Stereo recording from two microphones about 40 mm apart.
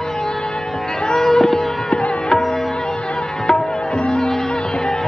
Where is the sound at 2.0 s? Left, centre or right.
Left.